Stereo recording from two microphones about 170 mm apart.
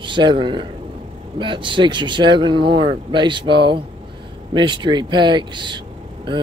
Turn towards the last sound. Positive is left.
turn(degrees=-25)  # may be behind; listen again after turning